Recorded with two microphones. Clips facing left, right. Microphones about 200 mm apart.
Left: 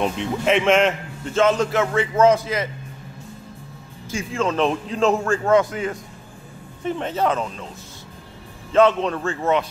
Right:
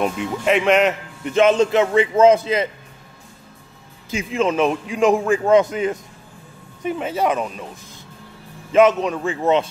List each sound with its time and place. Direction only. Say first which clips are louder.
0.0 s speech: right 1 dB; 5° right (ahead or behind)
1.2 s a man's voice: right 3 dB; 15° right (ahead or behind)
4.1 s a man's voice: right 3 dB; 20° right (ahead or behind)
4.6 s a man's voice: right 2 dB; 10° right (ahead or behind)
6.8 s a man's voice: right 1 dB; 10° right (ahead or behind)
8.7 s a man's voice: right 2 dB; 10° right (ahead or behind)